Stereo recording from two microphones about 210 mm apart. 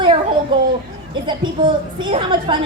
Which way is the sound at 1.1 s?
20° right (ahead or behind).